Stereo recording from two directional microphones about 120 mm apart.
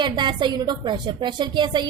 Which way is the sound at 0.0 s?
40° right (ahead or behind).